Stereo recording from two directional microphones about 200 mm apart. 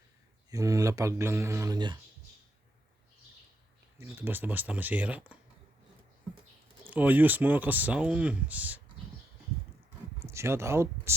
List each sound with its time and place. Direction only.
0.5 s speech: 15° right (ahead or behind)
3.9 s speech: 10° right (ahead or behind)
6.9 s speech: 10° right (ahead or behind)
10.2 s speech: 15° right (ahead or behind)